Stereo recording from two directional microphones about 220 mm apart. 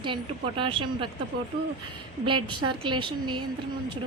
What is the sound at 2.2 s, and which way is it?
A woman's voice, 20° right (ahead or behind).